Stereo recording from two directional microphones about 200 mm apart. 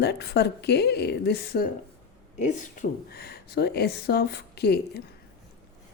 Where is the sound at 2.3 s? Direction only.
35° left (ahead or behind); by 5.0 s 55° left (ahead or behind).